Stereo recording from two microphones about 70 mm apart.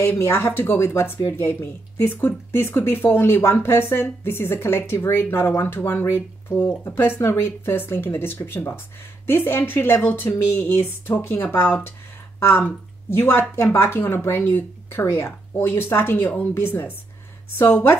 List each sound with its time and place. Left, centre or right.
0.0 s speech: left